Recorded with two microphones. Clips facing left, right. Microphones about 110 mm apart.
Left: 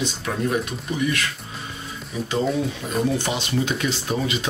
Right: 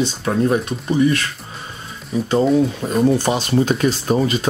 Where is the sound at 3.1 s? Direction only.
40° right (ahead or behind).